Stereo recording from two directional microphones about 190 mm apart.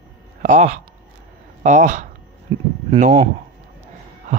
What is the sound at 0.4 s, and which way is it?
Speech, 40° right (ahead or behind).